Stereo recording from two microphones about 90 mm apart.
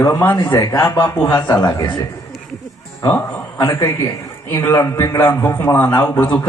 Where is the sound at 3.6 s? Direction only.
35° left (ahead or behind).